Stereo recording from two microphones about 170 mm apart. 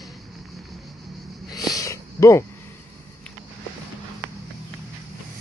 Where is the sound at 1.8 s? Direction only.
20° left (ahead or behind).